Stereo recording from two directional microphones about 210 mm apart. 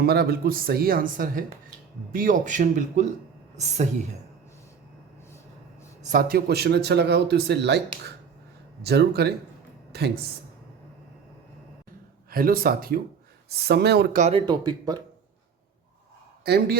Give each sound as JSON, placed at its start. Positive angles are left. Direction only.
{"t": 0.0, "sound": "a man's voice", "side_deg": -50}
{"t": 6.0, "sound": "a man's voice", "side_deg": -40}
{"t": 8.8, "sound": "a man's voice", "side_deg": -50}
{"t": 12.3, "sound": "a man's voice", "side_deg": -45}
{"t": 14.2, "sound": "speech", "side_deg": -30}
{"t": 16.4, "sound": "a man's voice", "side_deg": -50}